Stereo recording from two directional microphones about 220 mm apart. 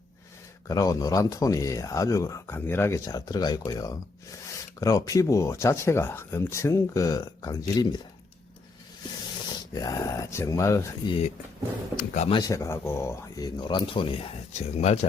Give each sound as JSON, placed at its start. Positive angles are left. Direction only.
{"t": 0.7, "sound": "a man's voice", "side_deg": 15}
{"t": 9.7, "sound": "a man's voice", "side_deg": 15}
{"t": 12.1, "sound": "speech", "side_deg": 30}
{"t": 12.4, "sound": "speech", "side_deg": 15}